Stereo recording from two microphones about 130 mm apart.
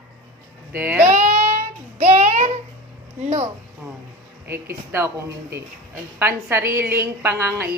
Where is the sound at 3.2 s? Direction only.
55° right (ahead or behind).